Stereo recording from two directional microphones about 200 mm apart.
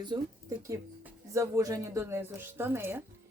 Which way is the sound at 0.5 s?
10° right (ahead or behind).